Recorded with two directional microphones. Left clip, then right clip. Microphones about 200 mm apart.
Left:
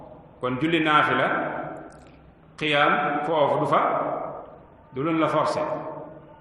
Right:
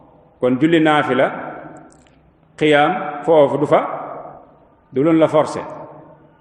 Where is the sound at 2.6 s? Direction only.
35° right (ahead or behind).